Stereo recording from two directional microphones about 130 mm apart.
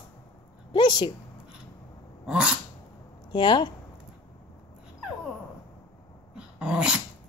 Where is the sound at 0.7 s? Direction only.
35° left (ahead or behind).